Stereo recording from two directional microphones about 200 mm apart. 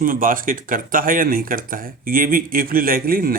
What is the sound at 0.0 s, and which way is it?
Speech, 45° right (ahead or behind).